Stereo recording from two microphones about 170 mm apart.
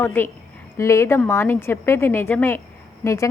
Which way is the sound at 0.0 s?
10° left (ahead or behind).